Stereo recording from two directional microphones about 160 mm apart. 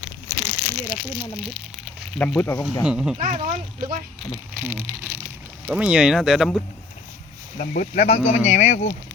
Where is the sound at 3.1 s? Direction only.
55° right (ahead or behind).